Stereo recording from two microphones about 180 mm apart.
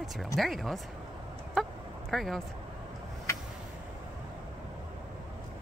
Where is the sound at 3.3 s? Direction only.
15° left (ahead or behind).